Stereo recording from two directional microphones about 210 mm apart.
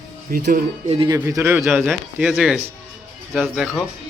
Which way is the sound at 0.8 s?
25° right (ahead or behind).